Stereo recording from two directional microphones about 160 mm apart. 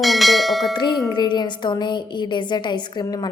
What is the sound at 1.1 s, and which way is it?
A woman's voice, 30° left (ahead or behind).